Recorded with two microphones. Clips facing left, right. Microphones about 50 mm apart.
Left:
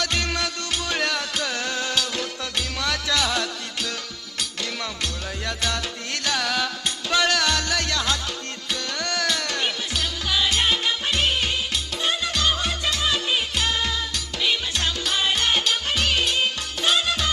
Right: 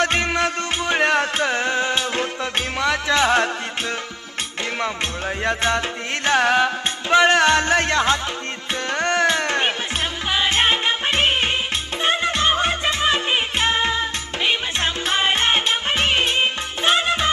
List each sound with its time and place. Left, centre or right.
0.0 s music: right
5.4 s music: right